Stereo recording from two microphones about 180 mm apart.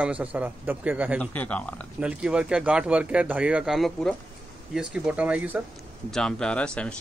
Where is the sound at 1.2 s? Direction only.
10° left (ahead or behind).